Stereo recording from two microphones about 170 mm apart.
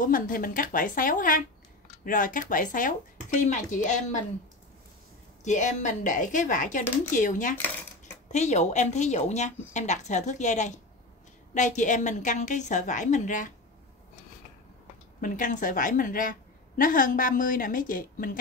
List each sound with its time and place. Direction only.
0.0 s a woman's voice: 55° left (ahead or behind)
5.4 s a woman's voice: 45° left (ahead or behind)
15.1 s a woman's voice: 50° left (ahead or behind)